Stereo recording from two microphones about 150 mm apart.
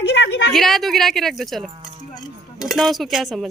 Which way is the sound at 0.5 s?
Centre (ahead or behind).